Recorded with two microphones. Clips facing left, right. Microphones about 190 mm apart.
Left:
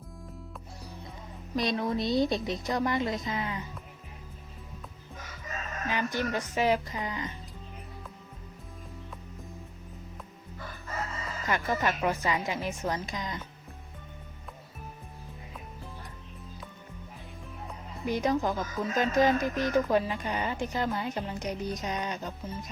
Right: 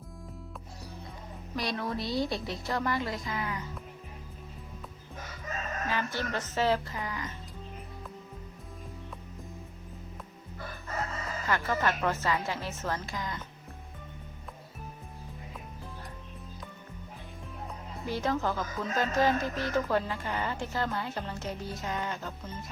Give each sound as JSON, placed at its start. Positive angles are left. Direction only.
{"t": 1.5, "sound": "a woman's voice", "side_deg": 20}
{"t": 5.9, "sound": "speech", "side_deg": 15}
{"t": 11.4, "sound": "speech", "side_deg": 15}
{"t": 18.0, "sound": "speech", "side_deg": 15}